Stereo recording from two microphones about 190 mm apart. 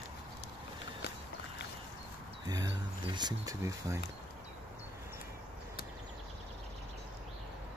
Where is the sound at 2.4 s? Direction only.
20° right (ahead or behind).